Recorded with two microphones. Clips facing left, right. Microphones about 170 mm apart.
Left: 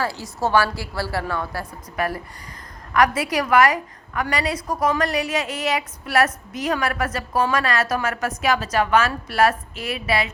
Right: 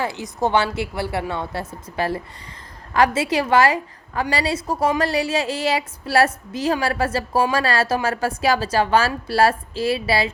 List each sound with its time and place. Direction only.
0.0 s a woman's voice: 20° right (ahead or behind)